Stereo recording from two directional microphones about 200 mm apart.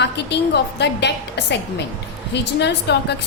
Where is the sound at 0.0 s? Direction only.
60° left (ahead or behind).